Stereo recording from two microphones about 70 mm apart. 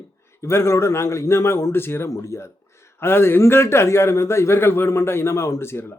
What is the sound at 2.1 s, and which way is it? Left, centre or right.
Speech, left.